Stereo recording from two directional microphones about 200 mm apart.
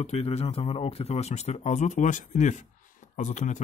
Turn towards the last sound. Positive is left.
turn(degrees=35)  # may be behind; listen again after turning